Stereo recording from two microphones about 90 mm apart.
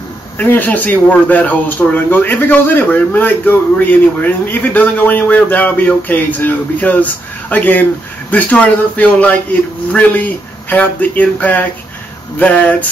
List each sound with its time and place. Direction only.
0.4 s speech: 20° left (ahead or behind)